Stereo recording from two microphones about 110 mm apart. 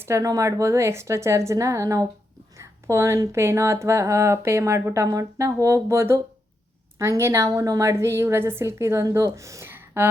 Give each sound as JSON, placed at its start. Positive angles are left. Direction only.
{"t": 0.0, "sound": "speech", "side_deg": -25}